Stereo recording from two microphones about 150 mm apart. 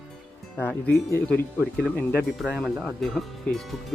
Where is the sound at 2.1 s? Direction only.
Centre (ahead or behind).